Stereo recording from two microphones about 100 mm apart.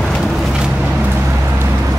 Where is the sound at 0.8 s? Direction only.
15° right (ahead or behind).